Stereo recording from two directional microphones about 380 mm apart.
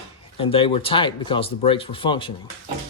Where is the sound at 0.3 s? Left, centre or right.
Centre.